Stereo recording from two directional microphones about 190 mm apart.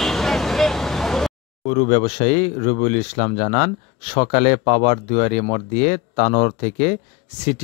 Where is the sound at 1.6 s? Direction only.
40° left (ahead or behind).